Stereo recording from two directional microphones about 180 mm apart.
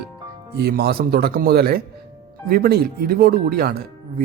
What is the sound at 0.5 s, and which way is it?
Speech, 60° right (ahead or behind).